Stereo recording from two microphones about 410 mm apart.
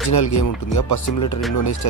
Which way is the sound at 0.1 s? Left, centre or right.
Left.